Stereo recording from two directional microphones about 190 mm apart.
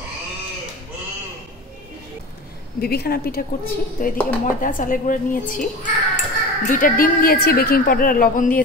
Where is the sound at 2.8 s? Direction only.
55° left (ahead or behind).